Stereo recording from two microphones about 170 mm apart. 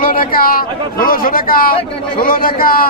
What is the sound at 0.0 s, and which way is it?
Speech, 55° left (ahead or behind).